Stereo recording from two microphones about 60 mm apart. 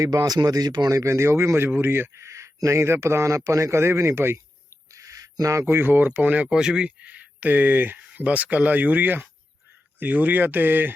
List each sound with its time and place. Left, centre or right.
0.0 s speech: right
1.0 s speech: right
4.9 s a sound: right
5.6 s speech: right
6.1 s speech: right
7.0 s speech: right